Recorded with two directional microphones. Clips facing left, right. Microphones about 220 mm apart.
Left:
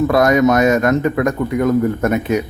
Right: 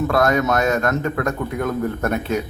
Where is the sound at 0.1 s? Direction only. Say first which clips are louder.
Left 5 dB; 15° left (ahead or behind).